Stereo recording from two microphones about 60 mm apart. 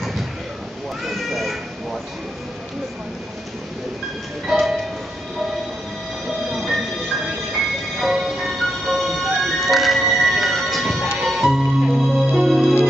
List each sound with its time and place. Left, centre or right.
1.0 s cat: centre
4.5 s music: centre
6.5 s train: centre
8.0 s music: centre